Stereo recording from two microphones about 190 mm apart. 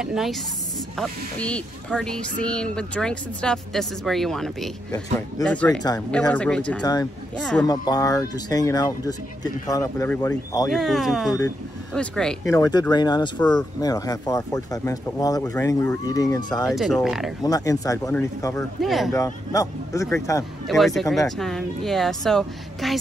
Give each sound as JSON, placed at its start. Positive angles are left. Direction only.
{"t": 0.0, "sound": "speech", "side_deg": 0}
{"t": 6.8, "sound": "speech", "side_deg": 20}
{"t": 7.3, "sound": "speech", "side_deg": 5}
{"t": 7.6, "sound": "speech", "side_deg": 20}
{"t": 10.7, "sound": "speech", "side_deg": 0}
{"t": 12.4, "sound": "speech", "side_deg": 20}
{"t": 13.4, "sound": "speech", "side_deg": 5}
{"t": 13.7, "sound": "speech", "side_deg": 20}
{"t": 16.7, "sound": "speech", "side_deg": 0}
{"t": 17.4, "sound": "speech", "side_deg": 20}
{"t": 18.8, "sound": "speech", "side_deg": 0}
{"t": 19.1, "sound": "speech", "side_deg": 15}
{"t": 20.6, "sound": "speech", "side_deg": 0}